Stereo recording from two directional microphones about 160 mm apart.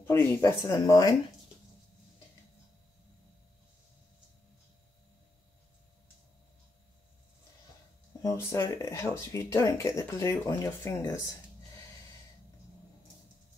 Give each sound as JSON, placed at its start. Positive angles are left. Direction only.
{"t": 0.0, "sound": "speech", "side_deg": 15}
{"t": 8.2, "sound": "speech", "side_deg": 20}